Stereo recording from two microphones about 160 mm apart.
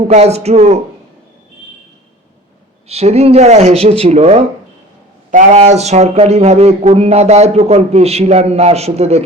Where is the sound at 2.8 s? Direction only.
40° right (ahead or behind).